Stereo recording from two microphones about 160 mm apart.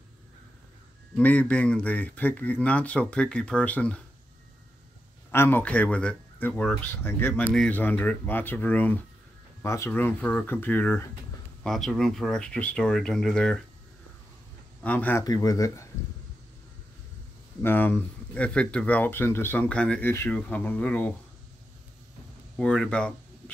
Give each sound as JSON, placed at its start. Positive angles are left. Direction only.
{"t": 1.1, "sound": "speech", "side_deg": 10}
{"t": 5.3, "sound": "speech", "side_deg": 15}
{"t": 11.6, "sound": "speech", "side_deg": 0}
{"t": 14.8, "sound": "speech", "side_deg": 10}
{"t": 15.2, "sound": "speech", "side_deg": 25}
{"t": 17.6, "sound": "speech", "side_deg": 15}
{"t": 22.6, "sound": "speech", "side_deg": 5}